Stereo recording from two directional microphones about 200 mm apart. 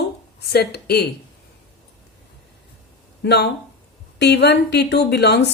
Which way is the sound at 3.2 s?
55° left (ahead or behind).